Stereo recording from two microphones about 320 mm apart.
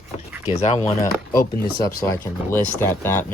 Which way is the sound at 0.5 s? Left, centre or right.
Left.